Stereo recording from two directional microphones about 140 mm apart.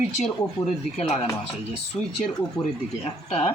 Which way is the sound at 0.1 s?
55° left (ahead or behind).